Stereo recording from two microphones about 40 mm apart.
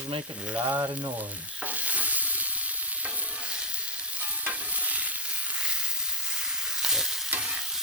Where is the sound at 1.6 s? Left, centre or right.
Right.